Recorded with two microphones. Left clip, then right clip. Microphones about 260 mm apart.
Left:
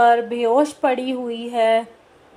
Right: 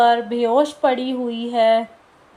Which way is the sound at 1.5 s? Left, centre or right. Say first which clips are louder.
Right 1 dB; left.